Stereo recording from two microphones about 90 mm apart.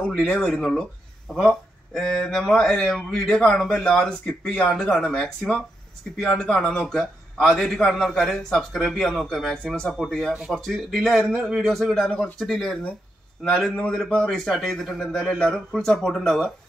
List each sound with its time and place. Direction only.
0.0 s a man's voice: 10° left (ahead or behind)